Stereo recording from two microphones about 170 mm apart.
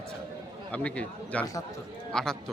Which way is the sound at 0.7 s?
10° left (ahead or behind).